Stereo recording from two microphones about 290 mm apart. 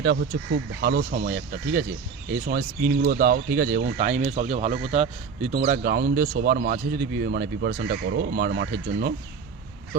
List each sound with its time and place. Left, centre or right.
0.0 s speech: right